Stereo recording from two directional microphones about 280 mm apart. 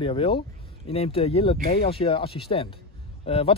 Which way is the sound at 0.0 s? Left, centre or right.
Centre.